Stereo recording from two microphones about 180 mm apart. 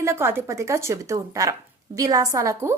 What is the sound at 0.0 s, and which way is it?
A woman's voice, 15° right (ahead or behind).